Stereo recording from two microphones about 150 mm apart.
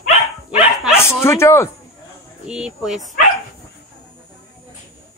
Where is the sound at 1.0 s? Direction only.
15° left (ahead or behind).